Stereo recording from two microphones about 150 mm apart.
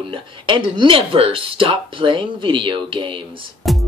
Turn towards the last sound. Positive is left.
turn(degrees=0)  # may be behind; listen again after turning